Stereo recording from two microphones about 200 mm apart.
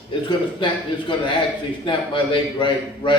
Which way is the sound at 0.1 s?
25° left (ahead or behind).